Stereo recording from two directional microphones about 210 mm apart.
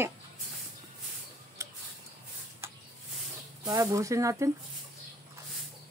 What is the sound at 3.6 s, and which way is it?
Speech, 15° right (ahead or behind).